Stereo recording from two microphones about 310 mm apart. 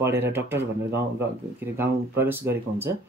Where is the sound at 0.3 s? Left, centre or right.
Centre.